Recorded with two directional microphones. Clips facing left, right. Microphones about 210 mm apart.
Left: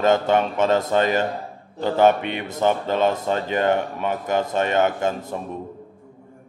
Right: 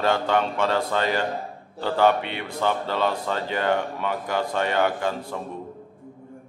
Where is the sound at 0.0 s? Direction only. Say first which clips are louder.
Left 4 dB; 20° left (ahead or behind).